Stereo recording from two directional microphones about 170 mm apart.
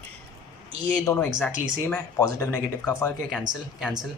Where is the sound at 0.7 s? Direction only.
15° left (ahead or behind).